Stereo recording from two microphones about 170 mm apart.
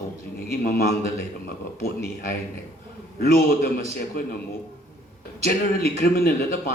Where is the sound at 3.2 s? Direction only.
70° left (ahead or behind).